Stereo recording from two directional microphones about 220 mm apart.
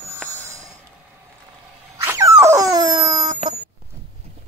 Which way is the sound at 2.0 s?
10° right (ahead or behind).